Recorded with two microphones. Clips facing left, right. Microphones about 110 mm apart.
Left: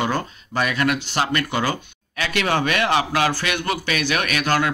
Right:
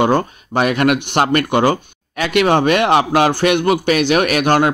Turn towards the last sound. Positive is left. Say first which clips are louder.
# right 7 dB
turn(degrees=-50)  # may be behind; listen again after turning